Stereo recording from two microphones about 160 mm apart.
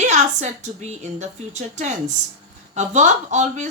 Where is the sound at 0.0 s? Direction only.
45° right (ahead or behind).